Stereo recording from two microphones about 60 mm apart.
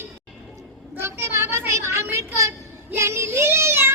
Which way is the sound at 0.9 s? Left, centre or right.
Right.